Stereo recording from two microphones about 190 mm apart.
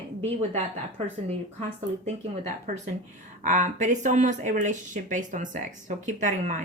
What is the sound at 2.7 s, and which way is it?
Speech, 35° right (ahead or behind).